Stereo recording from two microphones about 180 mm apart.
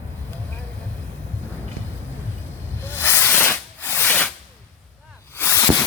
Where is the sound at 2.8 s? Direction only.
10° left (ahead or behind).